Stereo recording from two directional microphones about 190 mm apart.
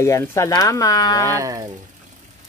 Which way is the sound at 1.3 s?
15° right (ahead or behind).